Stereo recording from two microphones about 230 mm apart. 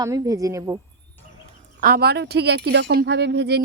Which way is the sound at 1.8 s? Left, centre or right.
Right.